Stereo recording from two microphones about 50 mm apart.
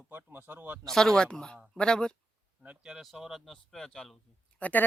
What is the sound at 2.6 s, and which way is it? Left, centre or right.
Speech, right.